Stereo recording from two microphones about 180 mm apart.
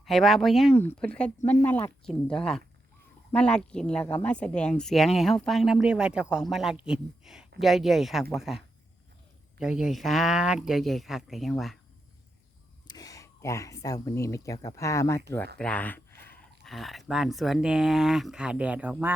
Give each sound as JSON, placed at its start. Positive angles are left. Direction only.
{"t": 0.0, "sound": "speech", "side_deg": 0}
{"t": 12.9, "sound": "speech", "side_deg": 20}
{"t": 15.5, "sound": "a sound", "side_deg": 5}
{"t": 16.6, "sound": "speech", "side_deg": 0}